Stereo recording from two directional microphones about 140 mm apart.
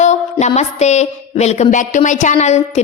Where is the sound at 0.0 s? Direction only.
55° left (ahead or behind).